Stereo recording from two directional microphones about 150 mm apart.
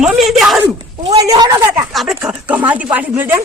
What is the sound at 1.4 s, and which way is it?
Speech, 25° right (ahead or behind).